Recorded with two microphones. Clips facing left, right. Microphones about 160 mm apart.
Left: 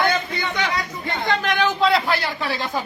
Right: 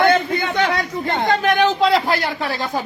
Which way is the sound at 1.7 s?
35° right (ahead or behind).